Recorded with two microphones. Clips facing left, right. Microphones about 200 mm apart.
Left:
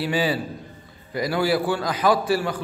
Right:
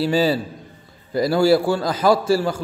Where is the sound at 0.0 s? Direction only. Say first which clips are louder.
Right 5 dB; 30° right (ahead or behind).